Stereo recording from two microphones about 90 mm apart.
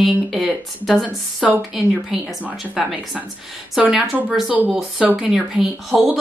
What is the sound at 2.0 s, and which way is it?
A woman's voice, 10° right (ahead or behind).